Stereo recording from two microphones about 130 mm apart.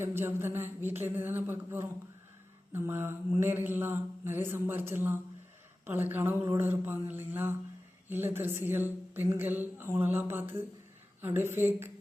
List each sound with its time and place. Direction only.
0.0 s a woman's voice: 15° right (ahead or behind)